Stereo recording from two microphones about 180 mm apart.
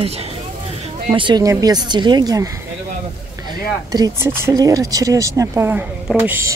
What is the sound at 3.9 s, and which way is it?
Speech, 20° right (ahead or behind).